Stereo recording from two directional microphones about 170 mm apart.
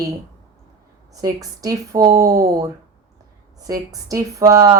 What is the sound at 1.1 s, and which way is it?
Speech, 20° right (ahead or behind).